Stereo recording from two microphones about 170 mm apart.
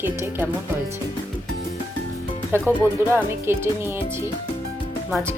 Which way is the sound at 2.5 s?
15° right (ahead or behind).